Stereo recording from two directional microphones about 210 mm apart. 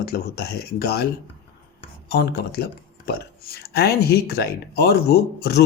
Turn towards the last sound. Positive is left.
turn(degrees=50)  # may be behind; listen again after turning